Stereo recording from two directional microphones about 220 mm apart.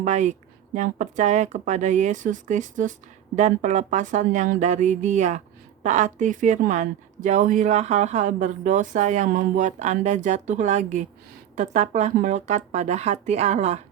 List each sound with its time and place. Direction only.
0.0 s a woman's voice: 30° right (ahead or behind)